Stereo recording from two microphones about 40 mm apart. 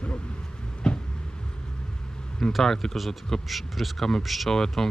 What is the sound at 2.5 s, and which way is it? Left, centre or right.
Speech, centre.